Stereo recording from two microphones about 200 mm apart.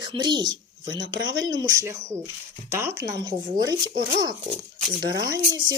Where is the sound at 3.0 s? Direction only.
15° right (ahead or behind).